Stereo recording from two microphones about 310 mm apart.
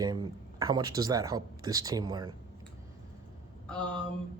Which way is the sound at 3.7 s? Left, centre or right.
Centre.